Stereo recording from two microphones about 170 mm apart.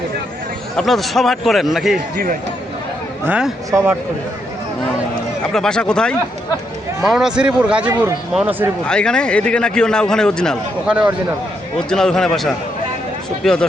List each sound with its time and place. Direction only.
0.8 s a man's voice: centre (ahead or behind)
3.2 s a man's voice: 5° right (ahead or behind)
3.7 s speech: 20° right (ahead or behind)
5.5 s a man's voice: 5° left (ahead or behind)
8.9 s a man's voice: 5° left (ahead or behind)